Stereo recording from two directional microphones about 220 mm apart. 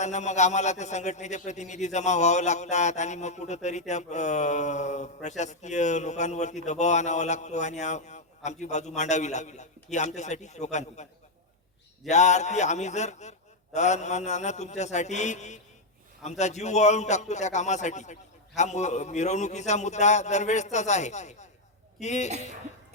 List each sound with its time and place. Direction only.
0.0 s a man's voice: 30° left (ahead or behind)
12.0 s a man's voice: 30° left (ahead or behind)